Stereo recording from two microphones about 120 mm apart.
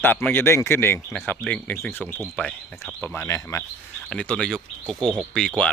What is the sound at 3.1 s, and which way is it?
Speech, 25° left (ahead or behind).